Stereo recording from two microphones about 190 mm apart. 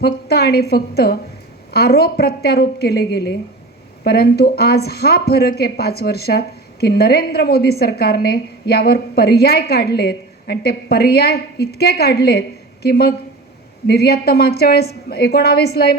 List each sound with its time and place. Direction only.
0.0 s a woman's voice: 55° left (ahead or behind)